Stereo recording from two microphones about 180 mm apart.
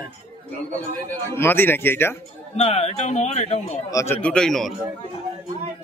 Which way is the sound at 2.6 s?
35° left (ahead or behind).